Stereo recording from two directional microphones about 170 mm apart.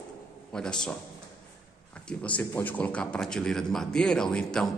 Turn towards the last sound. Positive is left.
turn(degrees=5)  # may be behind; listen again after turning